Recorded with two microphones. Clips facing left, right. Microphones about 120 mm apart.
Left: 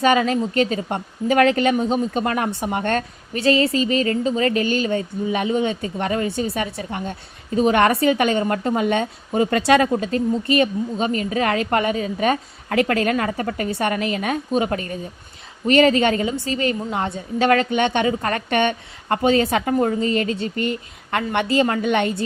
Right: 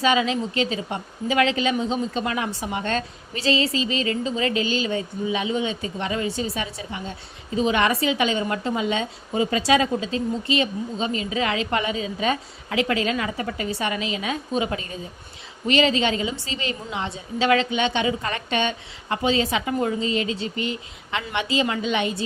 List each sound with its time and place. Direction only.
0.0 s a woman's voice: 50° left (ahead or behind)